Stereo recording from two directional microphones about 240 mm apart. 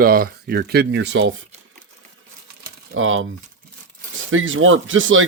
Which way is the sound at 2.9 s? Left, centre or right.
Right.